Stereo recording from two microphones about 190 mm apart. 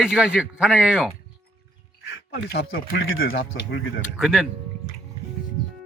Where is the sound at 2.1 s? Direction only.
75° left (ahead or behind); by 3.3 s 90° left.